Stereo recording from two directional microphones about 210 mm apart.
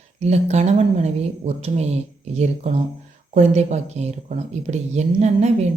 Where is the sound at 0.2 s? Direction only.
30° right (ahead or behind).